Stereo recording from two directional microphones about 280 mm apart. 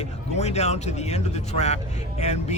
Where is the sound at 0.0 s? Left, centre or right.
Left.